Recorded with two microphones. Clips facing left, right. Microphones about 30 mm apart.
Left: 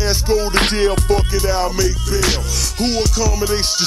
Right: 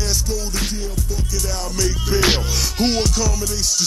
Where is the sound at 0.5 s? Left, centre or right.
Left.